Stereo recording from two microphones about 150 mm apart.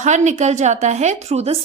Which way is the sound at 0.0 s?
50° right (ahead or behind).